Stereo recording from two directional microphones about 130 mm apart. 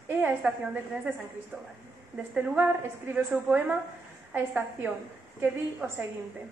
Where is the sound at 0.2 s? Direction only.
10° right (ahead or behind).